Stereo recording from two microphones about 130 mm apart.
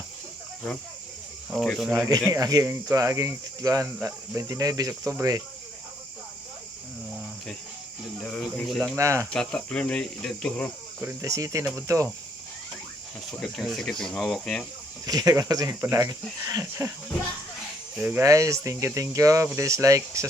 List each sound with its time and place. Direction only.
1.5 s speech: centre (ahead or behind)
2.3 s speech: 30° right (ahead or behind)
8.2 s speech: centre (ahead or behind)
9.0 s speech: 25° right (ahead or behind)
9.3 s speech: 5° left (ahead or behind)
11.2 s speech: 25° right (ahead or behind)
13.4 s speech: centre (ahead or behind)
15.0 s speech: 30° right (ahead or behind)
17.9 s speech: 15° right (ahead or behind)